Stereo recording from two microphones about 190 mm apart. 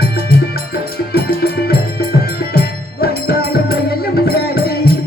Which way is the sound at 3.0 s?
55° left (ahead or behind).